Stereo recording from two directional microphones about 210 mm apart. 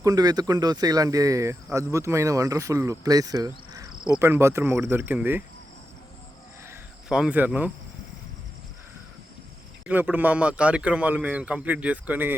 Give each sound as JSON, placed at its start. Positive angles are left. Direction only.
{"t": 0.0, "sound": "speech", "side_deg": -15}
{"t": 6.7, "sound": "cricket", "side_deg": -5}
{"t": 9.8, "sound": "speech", "side_deg": -10}